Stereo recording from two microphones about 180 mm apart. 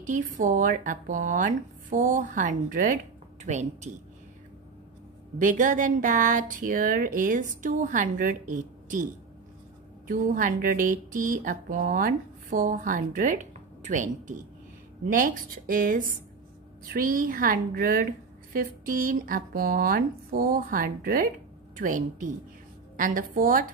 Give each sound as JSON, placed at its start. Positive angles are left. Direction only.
{"t": 0.0, "sound": "a woman's voice", "side_deg": -45}
{"t": 5.4, "sound": "speech", "side_deg": -45}
{"t": 10.0, "sound": "speech", "side_deg": -50}